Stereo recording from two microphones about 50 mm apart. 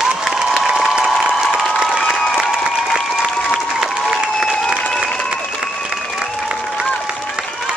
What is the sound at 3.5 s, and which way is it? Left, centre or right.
Applause, centre.